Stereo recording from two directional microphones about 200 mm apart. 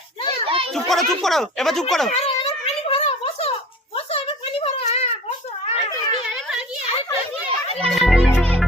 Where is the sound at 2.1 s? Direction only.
30° left (ahead or behind).